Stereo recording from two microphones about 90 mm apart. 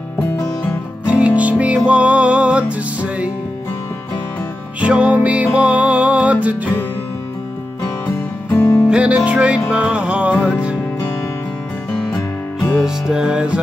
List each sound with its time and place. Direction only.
1.0 s music: 15° right (ahead or behind)
4.7 s music: 15° right (ahead or behind)
8.5 s music: 30° left (ahead or behind)
8.8 s music: 10° right (ahead or behind)
11.9 s music: 5° left (ahead or behind)
12.8 s music: 10° right (ahead or behind)